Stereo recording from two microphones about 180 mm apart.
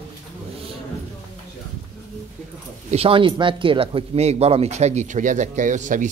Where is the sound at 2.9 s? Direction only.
30° right (ahead or behind).